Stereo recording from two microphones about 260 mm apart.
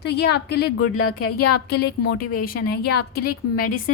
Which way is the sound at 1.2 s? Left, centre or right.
Left.